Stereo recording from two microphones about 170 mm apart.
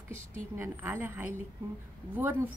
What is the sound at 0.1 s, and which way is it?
A woman's voice, 15° right (ahead or behind).